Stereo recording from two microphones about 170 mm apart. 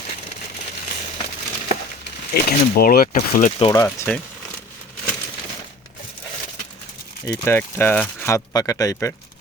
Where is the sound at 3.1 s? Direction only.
45° left (ahead or behind).